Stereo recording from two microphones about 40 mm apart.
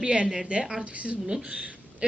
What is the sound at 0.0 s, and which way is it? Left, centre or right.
Speech, right.